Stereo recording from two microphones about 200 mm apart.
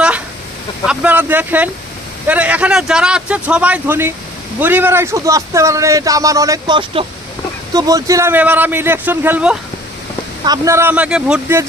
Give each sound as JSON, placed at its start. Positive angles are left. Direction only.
{"t": 0.9, "sound": "speech", "side_deg": -5}